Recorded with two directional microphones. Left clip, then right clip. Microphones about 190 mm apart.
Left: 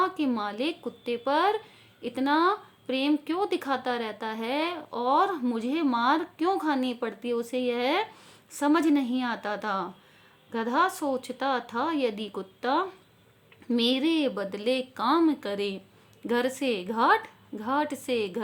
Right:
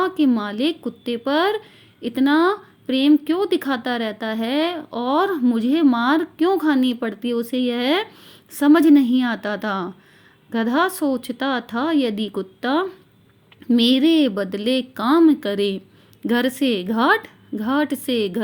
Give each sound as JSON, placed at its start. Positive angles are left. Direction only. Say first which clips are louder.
{"t": 0.0, "sound": "speech", "louder": "right 7 dB", "side_deg": -15}